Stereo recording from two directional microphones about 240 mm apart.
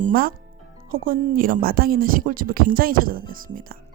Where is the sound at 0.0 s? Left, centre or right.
Right.